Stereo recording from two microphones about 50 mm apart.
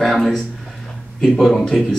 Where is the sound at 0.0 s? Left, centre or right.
Centre.